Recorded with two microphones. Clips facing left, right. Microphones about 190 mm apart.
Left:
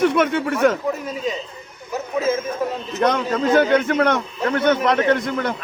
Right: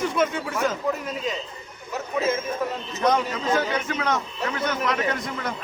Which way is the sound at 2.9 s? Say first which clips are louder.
Left 3 dB; 65° left (ahead or behind).